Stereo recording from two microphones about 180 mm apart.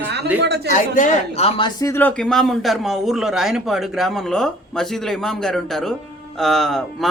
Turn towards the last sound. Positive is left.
turn(degrees=0)  # may be behind; listen again after turning